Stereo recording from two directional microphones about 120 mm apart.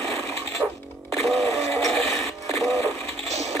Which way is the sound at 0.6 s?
15° right (ahead or behind).